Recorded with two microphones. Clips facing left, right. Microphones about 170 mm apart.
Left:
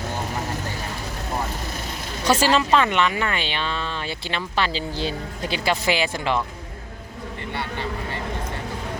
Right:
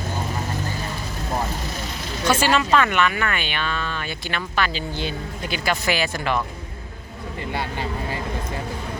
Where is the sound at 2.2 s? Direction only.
35° left (ahead or behind).